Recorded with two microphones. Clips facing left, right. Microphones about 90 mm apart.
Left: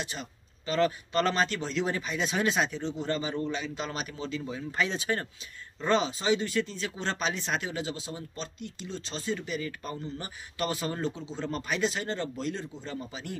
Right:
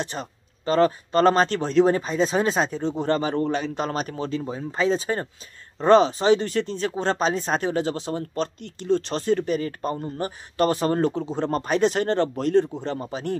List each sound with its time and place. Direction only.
0.0 s speech: 45° right (ahead or behind)
2.9 s speech: 55° right (ahead or behind); by 5.3 s 30° right (ahead or behind)
5.8 s speech: 50° right (ahead or behind)